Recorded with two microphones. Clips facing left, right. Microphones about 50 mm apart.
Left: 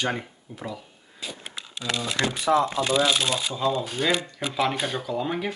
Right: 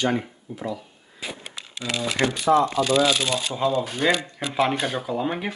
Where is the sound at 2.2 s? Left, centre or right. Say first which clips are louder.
Right 4 dB; right.